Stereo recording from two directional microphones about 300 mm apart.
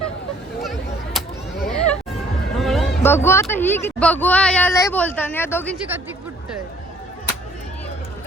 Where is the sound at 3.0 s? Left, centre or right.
Centre.